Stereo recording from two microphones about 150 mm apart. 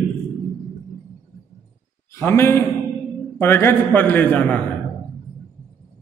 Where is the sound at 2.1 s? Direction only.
15° left (ahead or behind).